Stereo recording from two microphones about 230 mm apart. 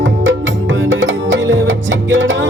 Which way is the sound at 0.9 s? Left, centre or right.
Right.